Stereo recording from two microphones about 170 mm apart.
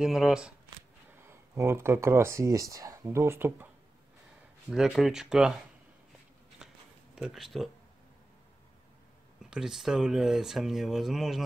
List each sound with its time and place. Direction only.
0.0 s speech: 5° right (ahead or behind)
1.1 s speech: 15° right (ahead or behind)
4.6 s speech: centre (ahead or behind)
6.6 s a sound: 5° right (ahead or behind)
7.2 s speech: centre (ahead or behind)
9.5 s speech: centre (ahead or behind)